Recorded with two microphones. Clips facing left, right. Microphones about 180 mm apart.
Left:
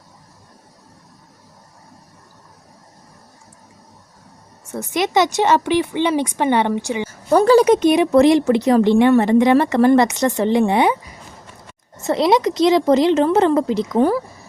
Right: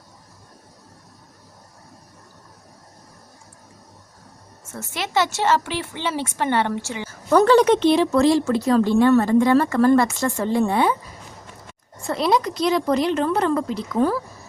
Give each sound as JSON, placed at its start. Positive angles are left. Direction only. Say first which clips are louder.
{"t": 4.7, "sound": "speech", "louder": "left 6 dB", "side_deg": 15}
{"t": 12.1, "sound": "speech", "louder": "left 5 dB", "side_deg": 90}
{"t": 13.1, "sound": "speech", "louder": "left 6 dB", "side_deg": 25}